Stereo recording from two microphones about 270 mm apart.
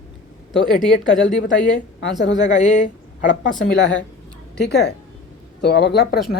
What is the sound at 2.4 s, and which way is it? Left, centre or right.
A woman's voice, left.